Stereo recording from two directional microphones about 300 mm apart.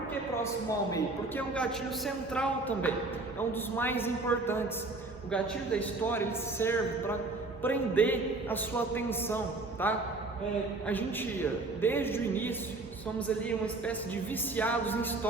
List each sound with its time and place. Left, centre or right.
0.1 s a man's voice: centre
14.5 s speech: centre